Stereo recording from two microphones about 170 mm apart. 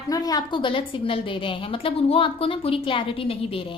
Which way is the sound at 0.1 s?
20° left (ahead or behind).